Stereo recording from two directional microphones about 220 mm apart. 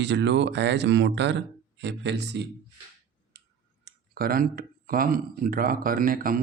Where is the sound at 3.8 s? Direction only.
45° right (ahead or behind).